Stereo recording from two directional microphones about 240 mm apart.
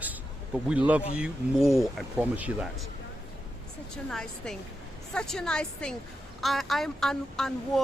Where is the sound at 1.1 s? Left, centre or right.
Centre.